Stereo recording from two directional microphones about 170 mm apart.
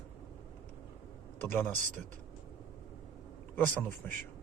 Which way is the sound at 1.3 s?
10° left (ahead or behind).